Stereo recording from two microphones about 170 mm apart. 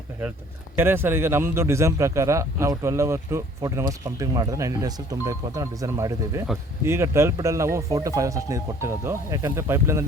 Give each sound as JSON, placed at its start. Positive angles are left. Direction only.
{"t": 0.8, "sound": "speech", "side_deg": -15}